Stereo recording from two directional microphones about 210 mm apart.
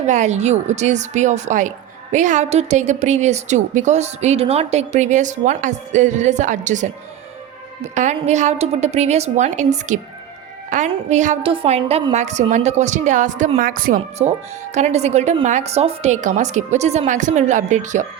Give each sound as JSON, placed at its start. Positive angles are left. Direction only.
{"t": 0.0, "sound": "a woman's voice", "side_deg": -35}